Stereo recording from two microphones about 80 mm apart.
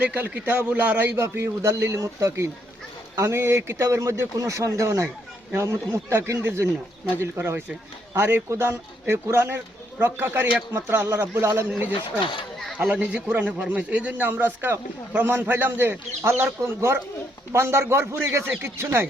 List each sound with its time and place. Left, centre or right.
0.0 s speech: centre
12.2 s speech: left
12.7 s a man's voice: centre; by 19.0 s right